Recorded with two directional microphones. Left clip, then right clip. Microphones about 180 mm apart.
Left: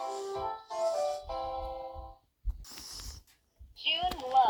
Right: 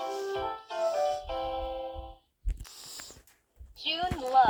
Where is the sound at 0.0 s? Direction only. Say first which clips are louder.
Right 3 dB; 35° right (ahead or behind).